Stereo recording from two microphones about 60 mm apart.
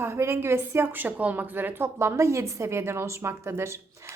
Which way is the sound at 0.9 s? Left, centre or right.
Right.